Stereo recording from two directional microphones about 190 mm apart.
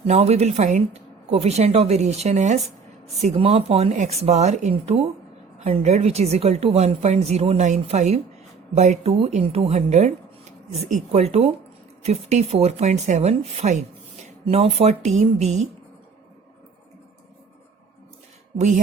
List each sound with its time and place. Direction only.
0.0 s a woman's voice: 35° right (ahead or behind)